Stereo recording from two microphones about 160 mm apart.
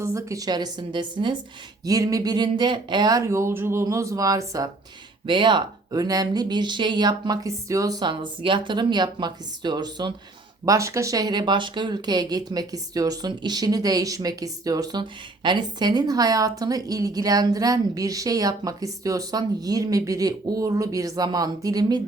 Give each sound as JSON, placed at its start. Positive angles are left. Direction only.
{"t": 0.0, "sound": "a woman's voice", "side_deg": -20}